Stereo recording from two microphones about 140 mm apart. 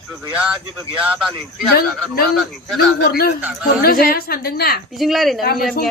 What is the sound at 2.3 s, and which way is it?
Speech, centre (ahead or behind).